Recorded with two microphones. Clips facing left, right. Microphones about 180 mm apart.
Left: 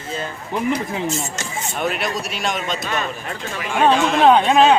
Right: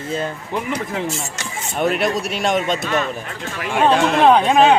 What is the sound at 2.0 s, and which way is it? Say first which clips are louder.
Speech: right 4 dB; 50° right (ahead or behind).